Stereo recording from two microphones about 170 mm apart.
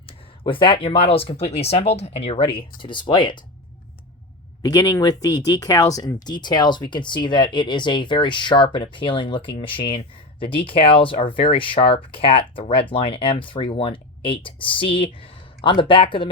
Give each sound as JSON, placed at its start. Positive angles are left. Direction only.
{"t": 0.0, "sound": "speech", "side_deg": 30}
{"t": 4.6, "sound": "speech", "side_deg": 25}